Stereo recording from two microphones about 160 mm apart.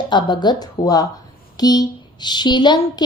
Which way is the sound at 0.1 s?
30° left (ahead or behind).